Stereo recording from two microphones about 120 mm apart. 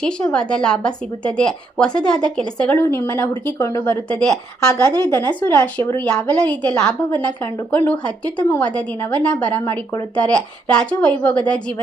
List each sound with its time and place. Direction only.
0.0 s a woman's voice: 10° left (ahead or behind)
2.8 s speech: 20° left (ahead or behind)
3.8 s a woman's voice: 5° left (ahead or behind)